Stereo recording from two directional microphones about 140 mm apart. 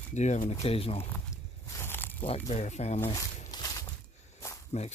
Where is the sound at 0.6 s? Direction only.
45° left (ahead or behind).